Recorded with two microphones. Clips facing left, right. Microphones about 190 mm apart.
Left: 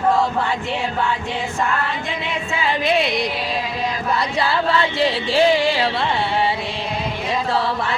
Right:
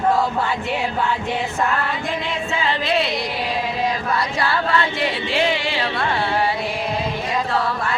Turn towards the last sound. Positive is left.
turn(degrees=35)  # may be behind; listen again after turning